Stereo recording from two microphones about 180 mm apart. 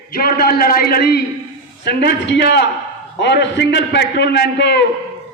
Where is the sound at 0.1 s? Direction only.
55° left (ahead or behind).